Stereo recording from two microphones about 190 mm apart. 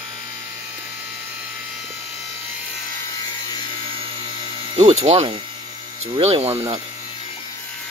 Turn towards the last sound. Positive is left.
turn(degrees=-30)  # may be behind; listen again after turning